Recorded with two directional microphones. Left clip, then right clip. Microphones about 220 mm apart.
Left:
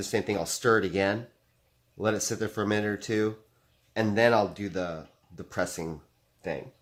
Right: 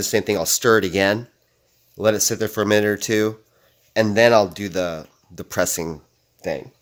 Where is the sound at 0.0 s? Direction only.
50° right (ahead or behind).